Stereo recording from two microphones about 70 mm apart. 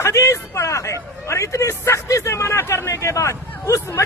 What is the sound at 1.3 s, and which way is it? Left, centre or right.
A man's voice, left.